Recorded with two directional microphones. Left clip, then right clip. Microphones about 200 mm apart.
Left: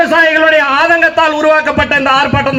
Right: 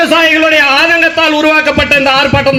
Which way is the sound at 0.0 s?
60° right (ahead or behind).